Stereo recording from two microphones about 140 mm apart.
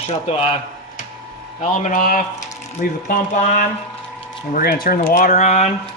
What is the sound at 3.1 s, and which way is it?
Speech, 65° left (ahead or behind).